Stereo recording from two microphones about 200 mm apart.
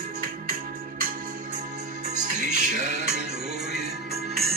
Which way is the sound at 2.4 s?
35° right (ahead or behind).